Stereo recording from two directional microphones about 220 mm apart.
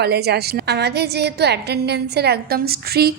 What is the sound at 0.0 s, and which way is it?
A woman's voice, 45° right (ahead or behind).